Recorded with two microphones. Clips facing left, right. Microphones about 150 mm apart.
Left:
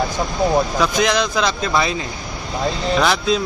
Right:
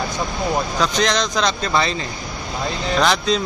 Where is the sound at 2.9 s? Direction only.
5° left (ahead or behind).